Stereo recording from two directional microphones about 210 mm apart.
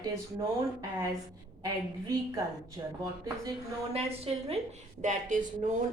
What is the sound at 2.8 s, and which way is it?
Speech, 20° right (ahead or behind).